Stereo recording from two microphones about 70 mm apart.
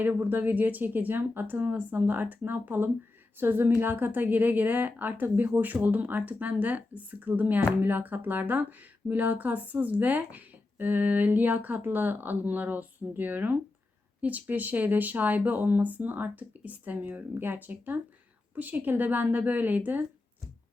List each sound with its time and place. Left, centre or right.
0.0 s speech: right